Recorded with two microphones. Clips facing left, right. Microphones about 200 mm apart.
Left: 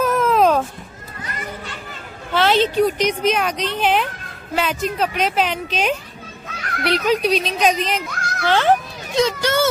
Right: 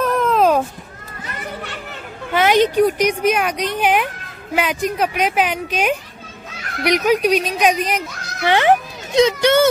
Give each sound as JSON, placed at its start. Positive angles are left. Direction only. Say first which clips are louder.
{"t": 0.0, "sound": "a sound", "louder": "even", "side_deg": 0}
{"t": 1.6, "sound": "chatter", "louder": "right 3 dB", "side_deg": -65}
{"t": 2.3, "sound": "a woman's voice", "louder": "right 2 dB", "side_deg": -15}